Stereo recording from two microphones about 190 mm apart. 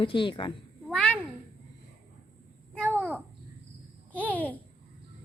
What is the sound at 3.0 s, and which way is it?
Babbling, 10° right (ahead or behind).